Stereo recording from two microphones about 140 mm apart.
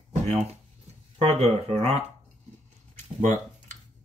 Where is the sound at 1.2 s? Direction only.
50° right (ahead or behind).